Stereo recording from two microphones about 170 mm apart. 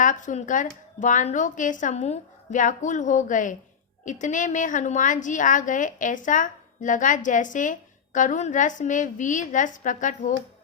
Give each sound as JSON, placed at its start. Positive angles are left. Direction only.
{"t": 0.0, "sound": "a woman's voice", "side_deg": 50}